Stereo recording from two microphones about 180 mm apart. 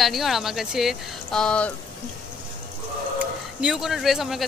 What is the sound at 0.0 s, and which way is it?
Speech, centre (ahead or behind).